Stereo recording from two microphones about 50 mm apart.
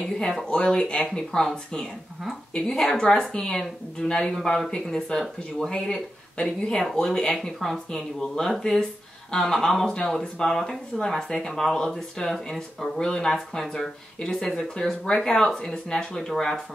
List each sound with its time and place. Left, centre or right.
0.5 s speech: centre